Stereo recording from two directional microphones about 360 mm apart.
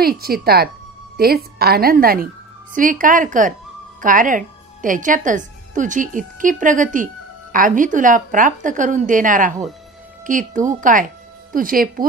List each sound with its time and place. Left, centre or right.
0.0 s a woman's voice: right